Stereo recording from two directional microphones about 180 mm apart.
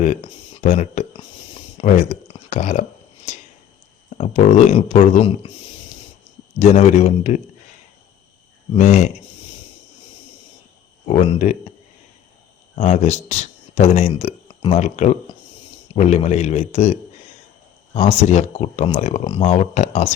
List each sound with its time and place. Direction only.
0.6 s a sound: 40° left (ahead or behind)
4.2 s speech: 40° left (ahead or behind)
6.6 s speech: 40° left (ahead or behind)
8.7 s speech: 40° left (ahead or behind)
11.1 s speech: 40° left (ahead or behind)
12.7 s speech: 40° left (ahead or behind)